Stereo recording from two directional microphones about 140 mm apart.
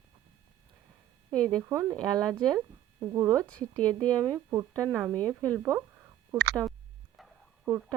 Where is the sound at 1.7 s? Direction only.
15° right (ahead or behind).